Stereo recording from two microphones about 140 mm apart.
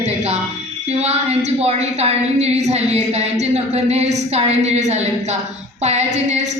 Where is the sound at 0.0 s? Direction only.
50° right (ahead or behind).